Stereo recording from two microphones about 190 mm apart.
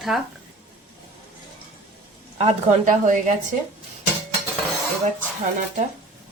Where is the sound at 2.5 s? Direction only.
45° right (ahead or behind).